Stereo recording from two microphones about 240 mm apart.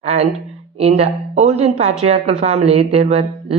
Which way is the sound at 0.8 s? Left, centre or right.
Right.